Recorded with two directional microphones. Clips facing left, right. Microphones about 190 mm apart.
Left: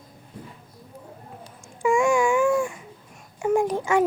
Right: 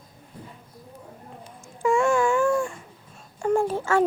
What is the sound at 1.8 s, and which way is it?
Babbling, 15° left (ahead or behind).